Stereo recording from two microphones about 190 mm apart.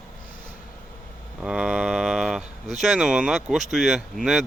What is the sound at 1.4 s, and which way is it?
Speech, 5° right (ahead or behind).